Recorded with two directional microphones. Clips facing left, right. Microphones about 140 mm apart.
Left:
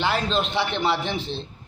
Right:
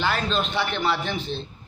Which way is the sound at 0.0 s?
25° left (ahead or behind).